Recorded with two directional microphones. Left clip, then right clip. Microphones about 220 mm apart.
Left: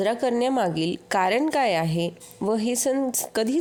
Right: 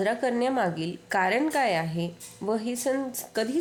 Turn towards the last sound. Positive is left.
turn(degrees=35)  # may be behind; listen again after turning